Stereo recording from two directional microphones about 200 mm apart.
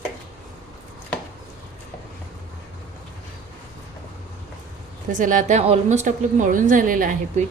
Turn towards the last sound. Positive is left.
turn(degrees=-40)  # may be behind; listen again after turning